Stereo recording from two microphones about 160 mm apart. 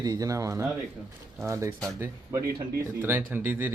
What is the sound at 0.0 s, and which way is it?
A man's voice, 20° right (ahead or behind).